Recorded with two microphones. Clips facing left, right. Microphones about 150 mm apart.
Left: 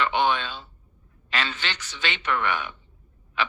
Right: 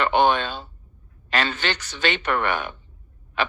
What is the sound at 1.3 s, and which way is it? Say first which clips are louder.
Speech: right 5 dB; 45° right (ahead or behind).